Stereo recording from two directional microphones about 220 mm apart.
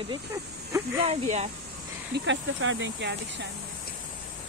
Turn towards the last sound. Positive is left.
turn(degrees=-55)  # may be behind; listen again after turning